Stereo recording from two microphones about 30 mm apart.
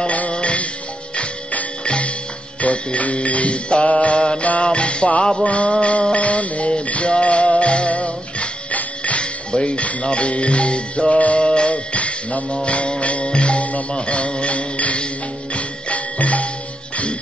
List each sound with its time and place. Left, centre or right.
0.3 s music: left
1.9 s music: left
4.4 s music: left
13.9 s mantra: left
15.5 s music: left